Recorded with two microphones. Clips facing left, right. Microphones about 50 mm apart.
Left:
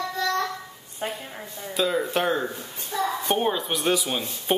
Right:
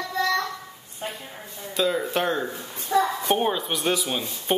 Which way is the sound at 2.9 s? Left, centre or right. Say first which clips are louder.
Right 6 dB; right.